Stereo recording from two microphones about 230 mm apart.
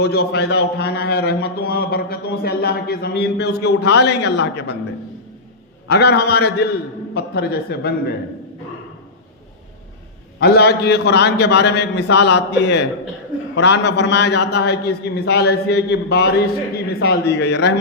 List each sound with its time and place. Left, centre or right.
0.0 s a man's voice: left
5.9 s a man's voice: left
10.4 s a man's voice: left